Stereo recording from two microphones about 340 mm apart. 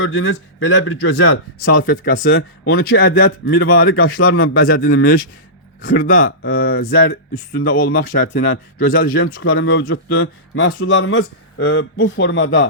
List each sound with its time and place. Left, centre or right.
0.0 s a man's voice: left
5.8 s a man's voice: left